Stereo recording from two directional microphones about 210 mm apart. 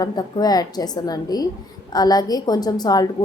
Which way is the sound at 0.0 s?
20° left (ahead or behind).